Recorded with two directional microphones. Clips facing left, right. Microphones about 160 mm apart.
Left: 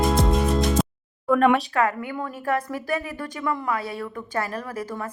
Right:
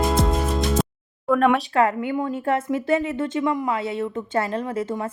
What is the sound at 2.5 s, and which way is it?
A woman's voice, 25° right (ahead or behind).